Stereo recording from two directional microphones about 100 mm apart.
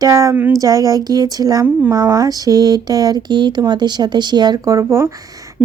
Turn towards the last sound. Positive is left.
turn(degrees=-30)  # may be behind; listen again after turning